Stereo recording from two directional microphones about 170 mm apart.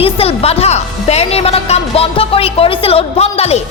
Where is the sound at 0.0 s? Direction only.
35° left (ahead or behind).